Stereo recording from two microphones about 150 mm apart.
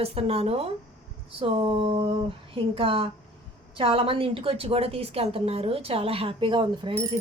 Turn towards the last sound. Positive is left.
turn(degrees=-35)  # may be behind; listen again after turning